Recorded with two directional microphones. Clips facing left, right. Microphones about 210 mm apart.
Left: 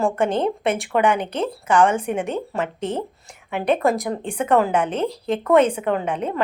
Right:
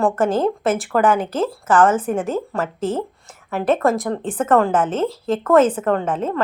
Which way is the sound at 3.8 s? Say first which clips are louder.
Right 2 dB; centre (ahead or behind).